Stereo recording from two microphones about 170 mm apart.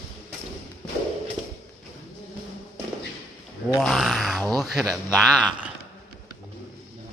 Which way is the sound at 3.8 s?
Centre (ahead or behind).